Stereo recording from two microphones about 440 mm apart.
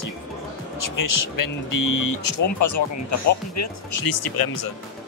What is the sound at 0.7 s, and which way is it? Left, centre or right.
Speech, left.